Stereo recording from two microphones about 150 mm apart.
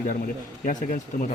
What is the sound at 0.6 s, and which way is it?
Speech, 60° left (ahead or behind).